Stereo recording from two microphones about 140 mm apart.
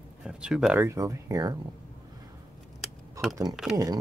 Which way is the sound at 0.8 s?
20° right (ahead or behind).